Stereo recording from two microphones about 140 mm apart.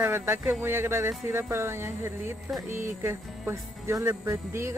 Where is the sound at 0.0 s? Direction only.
15° right (ahead or behind).